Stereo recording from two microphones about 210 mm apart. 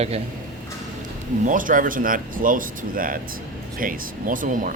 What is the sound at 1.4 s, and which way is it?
Speech, 40° right (ahead or behind).